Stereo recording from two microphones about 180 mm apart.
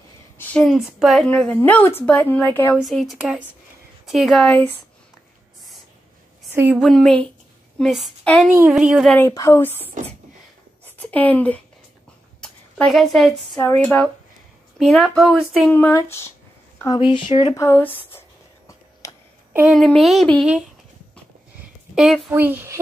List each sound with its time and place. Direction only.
0.4 s a woman's voice: 5° left (ahead or behind)
6.5 s speech: 10° right (ahead or behind)
6.8 s speech: centre (ahead or behind)
8.5 s speech: 10° right (ahead or behind)
9.2 s a woman's voice: 15° left (ahead or behind)
10.9 s speech: 10° left (ahead or behind)
12.4 s a sound: 5° left (ahead or behind)
14.8 s speech: centre (ahead or behind)
15.7 s speech: 10° left (ahead or behind); by 17.6 s 25° left (ahead or behind)
17.6 s a woman's voice: 15° left (ahead or behind)
19.0 s a sound: 20° left (ahead or behind)
19.5 s speech: 5° right (ahead or behind)
21.9 s speech: centre (ahead or behind)